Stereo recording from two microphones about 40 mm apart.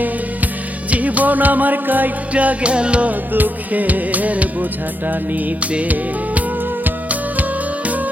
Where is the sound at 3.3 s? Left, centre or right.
Right.